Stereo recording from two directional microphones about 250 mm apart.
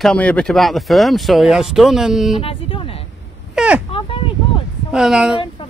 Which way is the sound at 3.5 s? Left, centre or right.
Centre.